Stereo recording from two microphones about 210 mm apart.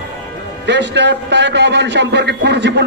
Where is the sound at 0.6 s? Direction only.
55° right (ahead or behind).